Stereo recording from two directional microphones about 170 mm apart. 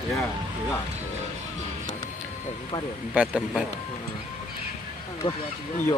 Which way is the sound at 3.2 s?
5° right (ahead or behind).